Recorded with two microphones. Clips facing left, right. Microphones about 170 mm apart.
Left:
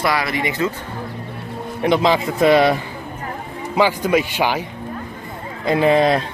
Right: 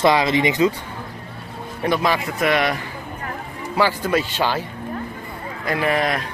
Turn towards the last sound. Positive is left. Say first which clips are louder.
# left 6 dB
turn(degrees=25)  # may be behind; listen again after turning